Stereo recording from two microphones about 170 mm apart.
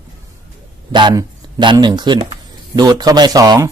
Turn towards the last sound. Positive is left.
turn(degrees=-20)  # may be behind; listen again after turning